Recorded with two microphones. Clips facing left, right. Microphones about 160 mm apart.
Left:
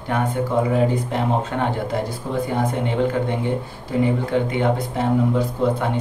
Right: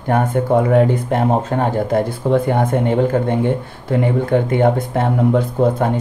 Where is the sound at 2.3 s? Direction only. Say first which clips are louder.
Right 7 dB; 60° right (ahead or behind).